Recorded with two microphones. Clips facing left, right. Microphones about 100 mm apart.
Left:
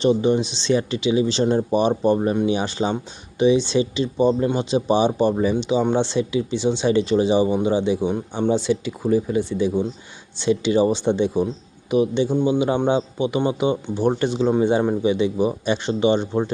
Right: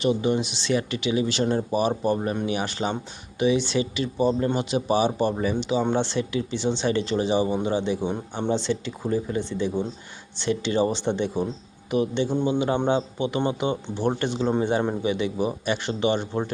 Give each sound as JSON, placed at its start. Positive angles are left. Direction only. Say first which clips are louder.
{"t": 0.0, "sound": "speech", "louder": "left 5 dB", "side_deg": 25}